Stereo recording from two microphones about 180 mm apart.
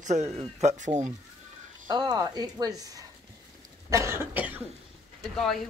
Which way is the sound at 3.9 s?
15° right (ahead or behind).